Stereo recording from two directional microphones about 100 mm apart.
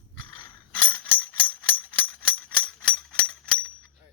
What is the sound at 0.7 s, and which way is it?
Music, 15° left (ahead or behind).